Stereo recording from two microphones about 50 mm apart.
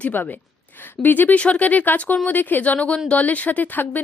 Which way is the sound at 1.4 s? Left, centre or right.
Left.